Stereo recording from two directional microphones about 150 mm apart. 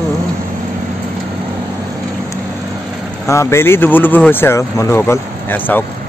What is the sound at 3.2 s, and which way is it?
Speech, 20° left (ahead or behind).